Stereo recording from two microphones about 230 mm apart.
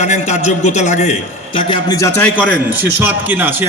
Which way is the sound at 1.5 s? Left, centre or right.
Centre.